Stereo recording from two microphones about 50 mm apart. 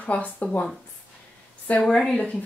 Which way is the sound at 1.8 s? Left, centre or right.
Centre.